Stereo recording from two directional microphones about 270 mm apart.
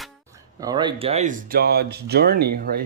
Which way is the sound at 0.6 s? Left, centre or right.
Centre.